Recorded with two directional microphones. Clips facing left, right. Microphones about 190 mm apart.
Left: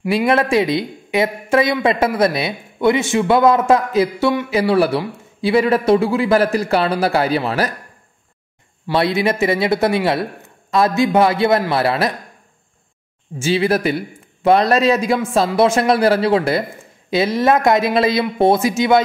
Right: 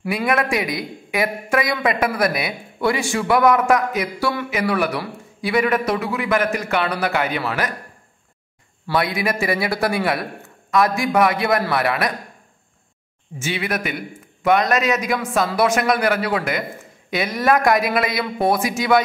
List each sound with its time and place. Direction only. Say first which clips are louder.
0.1 s speech: left 5 dB; 30° left (ahead or behind)
4.5 s a man's voice: left 7 dB; 30° left (ahead or behind)
8.8 s speech: left 4 dB; 25° left (ahead or behind)
13.4 s speech: left 8 dB; 30° left (ahead or behind)